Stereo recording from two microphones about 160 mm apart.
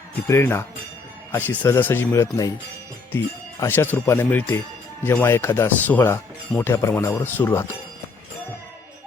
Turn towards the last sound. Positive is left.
turn(degrees=15)  # may be behind; listen again after turning